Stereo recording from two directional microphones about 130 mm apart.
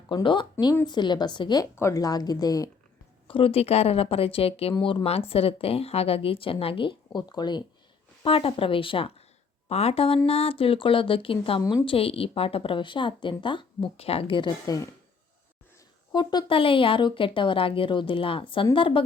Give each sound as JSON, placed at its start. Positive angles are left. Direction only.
{"t": 0.1, "sound": "a woman's voice", "side_deg": 40}
{"t": 3.2, "sound": "a woman's voice", "side_deg": 45}
{"t": 4.7, "sound": "a woman's voice", "side_deg": 35}
{"t": 8.2, "sound": "a woman's voice", "side_deg": 45}
{"t": 16.1, "sound": "speech", "side_deg": 35}